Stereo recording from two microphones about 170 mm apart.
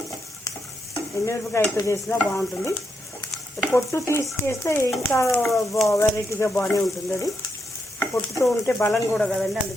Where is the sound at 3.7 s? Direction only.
15° left (ahead or behind).